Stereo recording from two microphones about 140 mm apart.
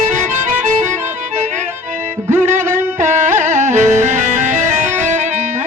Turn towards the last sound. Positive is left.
turn(degrees=-60)  # may be behind; listen again after turning